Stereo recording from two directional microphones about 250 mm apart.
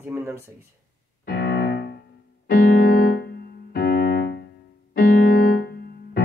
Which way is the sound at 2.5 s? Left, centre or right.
Left.